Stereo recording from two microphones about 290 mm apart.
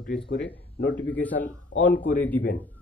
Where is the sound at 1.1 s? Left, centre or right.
Centre.